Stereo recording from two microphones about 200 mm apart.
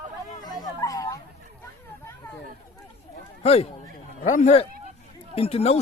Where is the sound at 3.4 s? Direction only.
30° left (ahead or behind).